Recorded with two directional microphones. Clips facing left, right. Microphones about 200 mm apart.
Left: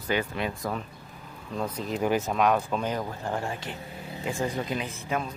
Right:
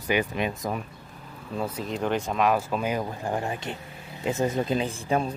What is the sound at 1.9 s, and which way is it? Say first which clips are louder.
Speech: left 1 dB; 5° left (ahead or behind).